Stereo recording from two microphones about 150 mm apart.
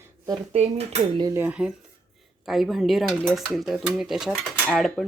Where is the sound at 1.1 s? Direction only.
25° right (ahead or behind).